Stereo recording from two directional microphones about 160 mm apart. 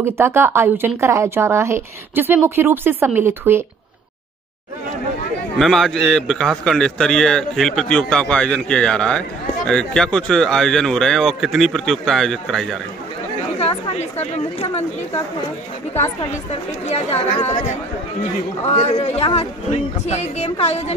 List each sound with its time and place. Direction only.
0.0 s speech: 15° right (ahead or behind)
5.6 s a man's voice: centre (ahead or behind)
13.6 s speech: 40° left (ahead or behind)
16.9 s speech: 40° left (ahead or behind)